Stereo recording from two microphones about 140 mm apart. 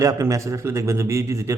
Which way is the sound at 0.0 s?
25° right (ahead or behind).